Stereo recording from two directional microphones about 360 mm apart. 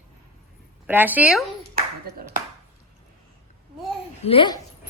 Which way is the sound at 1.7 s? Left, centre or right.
Right.